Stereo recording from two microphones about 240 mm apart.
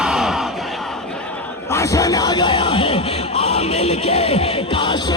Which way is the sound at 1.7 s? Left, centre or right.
Centre.